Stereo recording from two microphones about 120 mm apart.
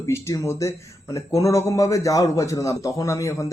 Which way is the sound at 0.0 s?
25° left (ahead or behind).